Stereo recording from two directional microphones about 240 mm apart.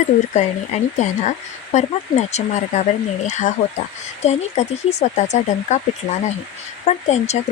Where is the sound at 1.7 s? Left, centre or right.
Left.